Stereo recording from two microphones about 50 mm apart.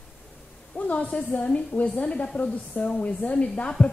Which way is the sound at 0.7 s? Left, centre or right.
Left.